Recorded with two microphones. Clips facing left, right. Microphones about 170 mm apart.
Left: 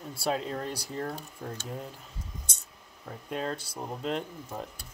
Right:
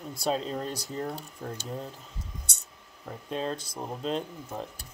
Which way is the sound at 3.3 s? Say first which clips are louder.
Right 1 dB; 20° right (ahead or behind).